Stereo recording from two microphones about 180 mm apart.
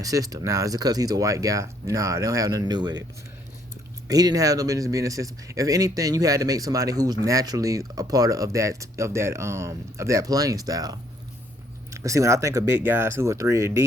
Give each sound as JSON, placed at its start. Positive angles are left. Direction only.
{"t": 0.0, "sound": "speech", "side_deg": -20}
{"t": 4.1, "sound": "speech", "side_deg": -20}